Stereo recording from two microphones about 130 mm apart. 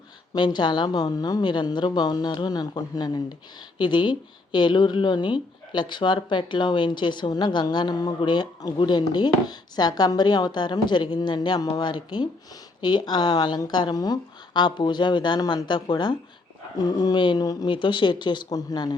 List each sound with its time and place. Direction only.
0.3 s a woman's voice: 35° left (ahead or behind)